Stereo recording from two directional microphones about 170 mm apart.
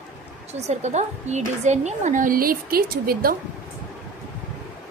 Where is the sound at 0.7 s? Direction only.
40° right (ahead or behind); by 3.4 s 60° right (ahead or behind).